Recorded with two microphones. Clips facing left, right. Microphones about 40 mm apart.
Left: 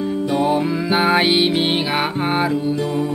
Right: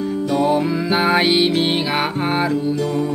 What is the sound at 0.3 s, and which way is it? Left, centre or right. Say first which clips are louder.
Music: right 1 dB; centre.